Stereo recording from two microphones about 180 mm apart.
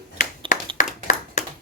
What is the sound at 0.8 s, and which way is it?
Clapping, 45° left (ahead or behind).